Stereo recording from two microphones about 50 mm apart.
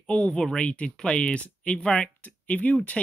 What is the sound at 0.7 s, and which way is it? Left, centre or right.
Speech, left.